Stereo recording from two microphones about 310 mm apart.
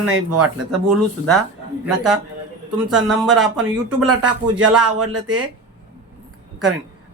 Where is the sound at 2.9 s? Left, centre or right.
Centre.